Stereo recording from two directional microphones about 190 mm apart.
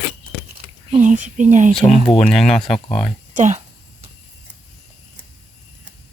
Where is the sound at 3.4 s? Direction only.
35° right (ahead or behind).